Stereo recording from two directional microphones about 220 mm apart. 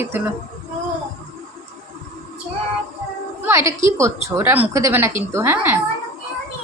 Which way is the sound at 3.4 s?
10° right (ahead or behind).